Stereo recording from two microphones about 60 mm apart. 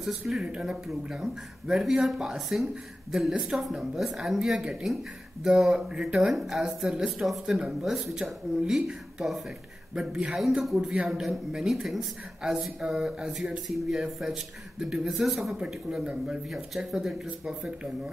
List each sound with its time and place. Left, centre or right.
0.4 s speech: centre
6.3 s speech: centre
16.4 s speech: centre